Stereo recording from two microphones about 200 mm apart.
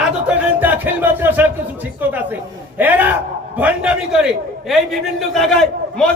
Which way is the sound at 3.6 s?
5° right (ahead or behind).